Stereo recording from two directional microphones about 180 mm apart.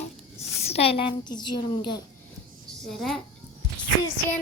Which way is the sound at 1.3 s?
25° left (ahead or behind).